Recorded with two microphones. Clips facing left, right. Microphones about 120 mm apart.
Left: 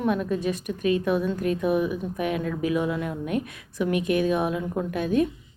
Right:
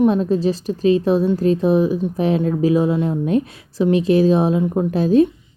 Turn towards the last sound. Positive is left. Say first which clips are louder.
# right 9 dB
turn(degrees=-30)  # may be behind; listen again after turning